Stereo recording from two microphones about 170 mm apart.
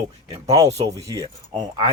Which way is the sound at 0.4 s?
20° right (ahead or behind).